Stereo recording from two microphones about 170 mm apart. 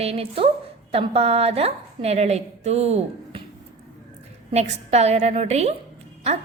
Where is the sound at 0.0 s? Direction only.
35° right (ahead or behind).